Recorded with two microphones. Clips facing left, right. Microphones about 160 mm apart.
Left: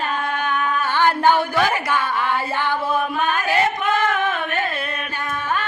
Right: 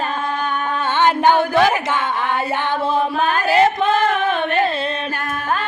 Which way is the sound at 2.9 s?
30° right (ahead or behind).